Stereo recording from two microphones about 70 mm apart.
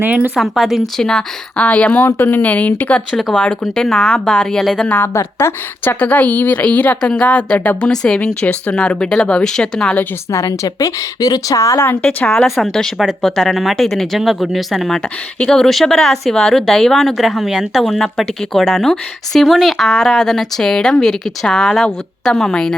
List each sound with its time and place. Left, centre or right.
0.0 s speech: right
0.3 s speech: centre
2.0 s a woman's voice: left
3.1 s speech: centre
3.3 s speech: centre
5.1 s a woman's voice: left; by 9.9 s centre
10.3 s speech: left
12.0 s speech: centre
12.5 s speech: centre